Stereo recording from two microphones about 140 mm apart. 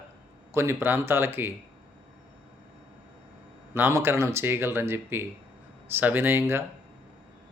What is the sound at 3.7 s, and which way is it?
Speech, 15° right (ahead or behind).